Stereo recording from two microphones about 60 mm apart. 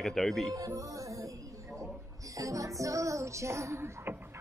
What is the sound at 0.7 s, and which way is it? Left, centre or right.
Music, right.